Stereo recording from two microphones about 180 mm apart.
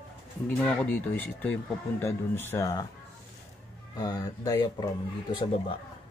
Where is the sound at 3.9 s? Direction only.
20° left (ahead or behind).